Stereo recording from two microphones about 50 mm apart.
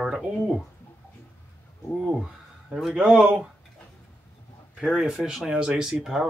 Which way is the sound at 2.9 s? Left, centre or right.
Centre.